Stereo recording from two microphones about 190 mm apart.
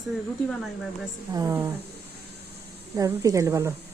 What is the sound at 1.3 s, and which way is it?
Speech, 15° right (ahead or behind).